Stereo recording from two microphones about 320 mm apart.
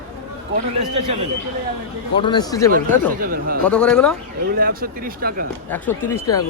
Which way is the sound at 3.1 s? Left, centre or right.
Right.